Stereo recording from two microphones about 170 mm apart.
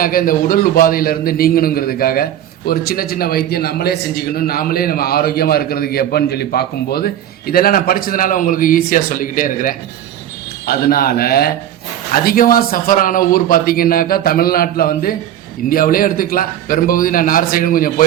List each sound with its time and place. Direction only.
0.0 s a man's voice: 55° left (ahead or behind)